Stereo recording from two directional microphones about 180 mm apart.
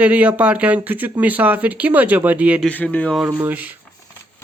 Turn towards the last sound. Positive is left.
turn(degrees=-10)  # may be behind; listen again after turning